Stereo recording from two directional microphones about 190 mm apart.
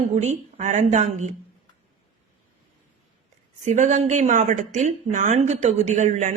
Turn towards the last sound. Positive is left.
turn(degrees=-40)  # may be behind; listen again after turning